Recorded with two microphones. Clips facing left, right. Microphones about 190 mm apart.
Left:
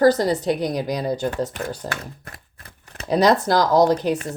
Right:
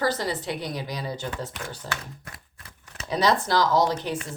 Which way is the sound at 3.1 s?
40° left (ahead or behind).